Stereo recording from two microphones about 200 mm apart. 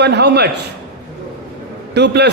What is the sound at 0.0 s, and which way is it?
Speech, 55° right (ahead or behind).